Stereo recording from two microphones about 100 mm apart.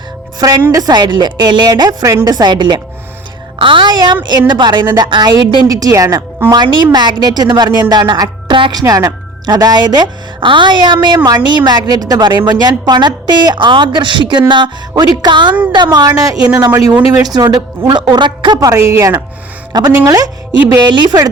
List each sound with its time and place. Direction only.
0.3 s a woman's voice: 40° right (ahead or behind)
5.6 s a woman's voice: 35° right (ahead or behind); by 8.8 s 55° right (ahead or behind)
8.8 s a woman's voice: 35° right (ahead or behind)
17.3 s a woman's voice: 45° right (ahead or behind)
18.9 s a woman's voice: 35° right (ahead or behind)